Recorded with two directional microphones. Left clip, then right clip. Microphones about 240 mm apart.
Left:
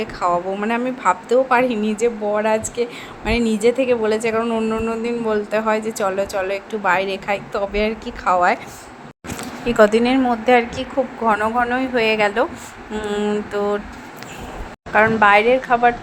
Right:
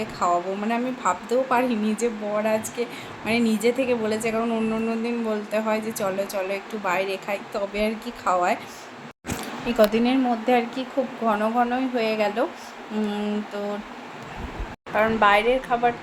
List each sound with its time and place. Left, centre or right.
0.0 s a woman's voice: centre
9.6 s a woman's voice: centre
14.9 s a woman's voice: centre